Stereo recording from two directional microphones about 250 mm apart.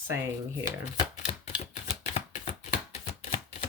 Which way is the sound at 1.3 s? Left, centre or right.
Left.